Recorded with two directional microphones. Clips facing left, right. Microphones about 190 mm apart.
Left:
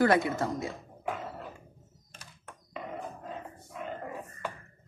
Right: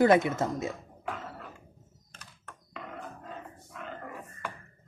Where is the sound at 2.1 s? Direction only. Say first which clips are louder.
Left 1 dB; 10° left (ahead or behind).